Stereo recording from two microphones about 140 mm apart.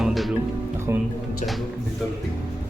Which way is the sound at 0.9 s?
20° right (ahead or behind).